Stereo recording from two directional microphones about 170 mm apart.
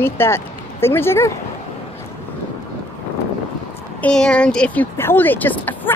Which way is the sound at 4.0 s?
5° left (ahead or behind).